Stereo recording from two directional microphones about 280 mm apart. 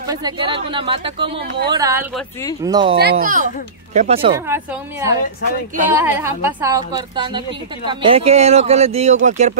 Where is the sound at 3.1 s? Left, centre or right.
Right.